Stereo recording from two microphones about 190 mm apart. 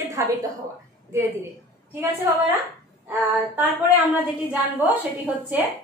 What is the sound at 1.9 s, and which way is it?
A woman's voice, 10° right (ahead or behind).